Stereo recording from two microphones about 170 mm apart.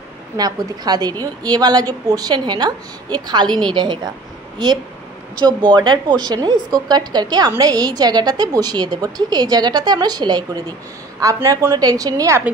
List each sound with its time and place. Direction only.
0.4 s a woman's voice: 25° right (ahead or behind)
5.8 s a woman's voice: 25° right (ahead or behind)